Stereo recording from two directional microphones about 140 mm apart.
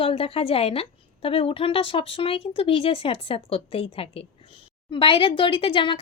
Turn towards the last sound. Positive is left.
turn(degrees=40)  # may be behind; listen again after turning